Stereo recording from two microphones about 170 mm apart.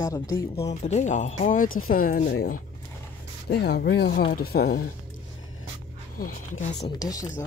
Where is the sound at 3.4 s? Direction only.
80° left.